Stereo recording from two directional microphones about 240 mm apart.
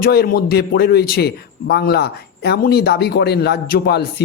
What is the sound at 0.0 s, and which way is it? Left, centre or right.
A man's voice, left.